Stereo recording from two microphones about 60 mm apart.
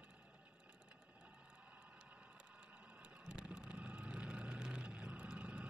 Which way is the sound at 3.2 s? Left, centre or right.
Centre.